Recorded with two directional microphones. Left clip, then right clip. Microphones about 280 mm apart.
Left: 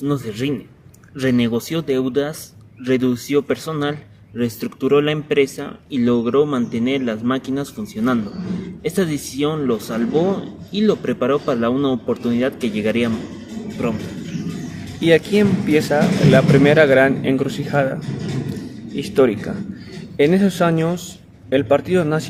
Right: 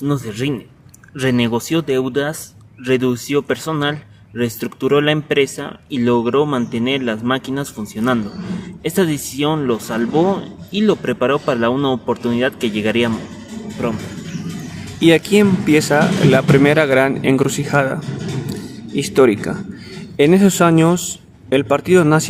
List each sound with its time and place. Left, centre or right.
0.0 s speech: right
15.0 s speech: right